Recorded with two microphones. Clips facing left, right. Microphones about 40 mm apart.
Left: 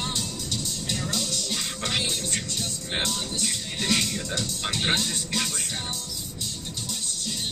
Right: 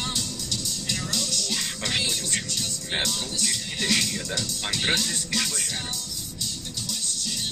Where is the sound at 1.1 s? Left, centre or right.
Left.